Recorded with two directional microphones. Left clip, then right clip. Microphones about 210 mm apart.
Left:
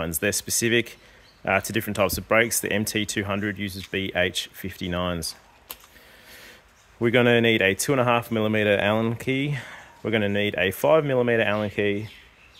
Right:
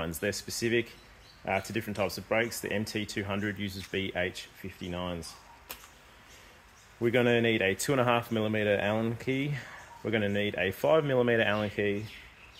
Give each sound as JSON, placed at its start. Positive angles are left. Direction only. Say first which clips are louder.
{"t": 0.0, "sound": "speech", "louder": "left 7 dB", "side_deg": 40}
{"t": 7.0, "sound": "speech", "louder": "left 7 dB", "side_deg": 40}